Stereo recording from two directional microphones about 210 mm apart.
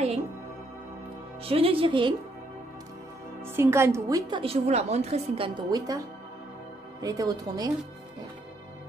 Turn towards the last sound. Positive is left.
turn(degrees=-20)  # may be behind; listen again after turning